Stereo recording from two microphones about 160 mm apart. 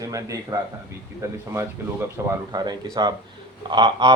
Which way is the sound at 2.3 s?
25° right (ahead or behind).